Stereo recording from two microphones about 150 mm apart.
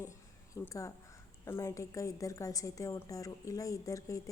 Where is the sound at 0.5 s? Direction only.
20° left (ahead or behind).